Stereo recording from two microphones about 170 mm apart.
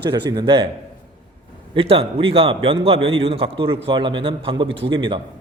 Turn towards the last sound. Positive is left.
turn(degrees=-30)  # may be behind; listen again after turning